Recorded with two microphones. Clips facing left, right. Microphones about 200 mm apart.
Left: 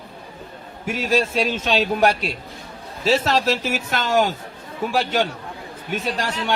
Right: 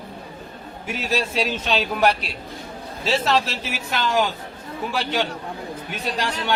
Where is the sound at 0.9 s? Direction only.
50° left (ahead or behind).